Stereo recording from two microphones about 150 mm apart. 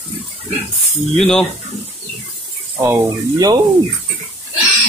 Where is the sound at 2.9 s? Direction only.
25° right (ahead or behind).